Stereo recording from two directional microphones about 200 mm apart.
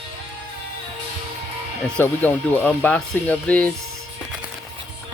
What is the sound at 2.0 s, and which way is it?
Speech, 10° left (ahead or behind).